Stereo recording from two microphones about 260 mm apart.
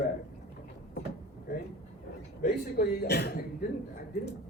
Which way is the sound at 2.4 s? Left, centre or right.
Left.